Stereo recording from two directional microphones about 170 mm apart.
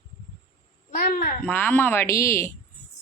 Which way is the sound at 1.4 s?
10° left (ahead or behind).